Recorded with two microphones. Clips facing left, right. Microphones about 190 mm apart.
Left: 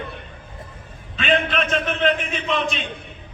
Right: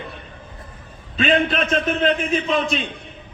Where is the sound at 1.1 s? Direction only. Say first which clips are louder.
Right 2 dB; 35° right (ahead or behind).